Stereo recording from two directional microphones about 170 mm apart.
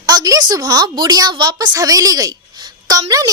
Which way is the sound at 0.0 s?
25° right (ahead or behind).